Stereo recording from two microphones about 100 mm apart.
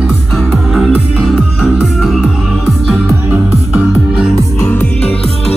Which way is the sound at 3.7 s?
15° right (ahead or behind).